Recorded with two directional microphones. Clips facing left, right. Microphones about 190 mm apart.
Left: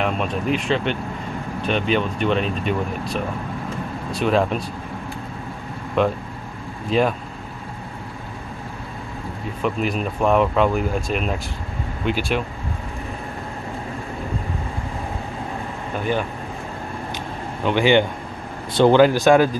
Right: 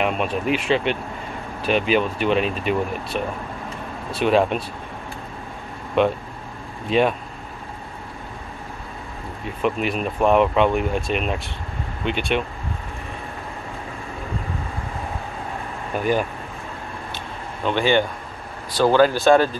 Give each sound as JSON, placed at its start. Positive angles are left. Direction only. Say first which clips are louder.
{"t": 0.0, "sound": "speech", "louder": "right 1 dB", "side_deg": -5}
{"t": 6.0, "sound": "speech", "louder": "right 1 dB", "side_deg": 0}
{"t": 9.6, "sound": "speech", "louder": "even", "side_deg": 0}
{"t": 17.6, "sound": "speech", "louder": "left 2 dB", "side_deg": 15}